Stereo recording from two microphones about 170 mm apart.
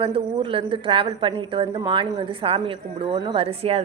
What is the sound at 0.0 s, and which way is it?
A woman's voice, 30° right (ahead or behind).